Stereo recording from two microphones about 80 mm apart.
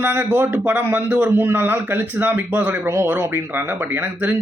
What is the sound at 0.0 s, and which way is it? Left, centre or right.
Speech, right.